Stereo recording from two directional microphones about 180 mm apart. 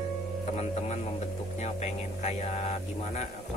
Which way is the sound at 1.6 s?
40° left (ahead or behind).